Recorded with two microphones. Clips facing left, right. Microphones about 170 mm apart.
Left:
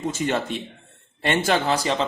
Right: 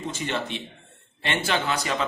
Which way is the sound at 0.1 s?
45° left (ahead or behind).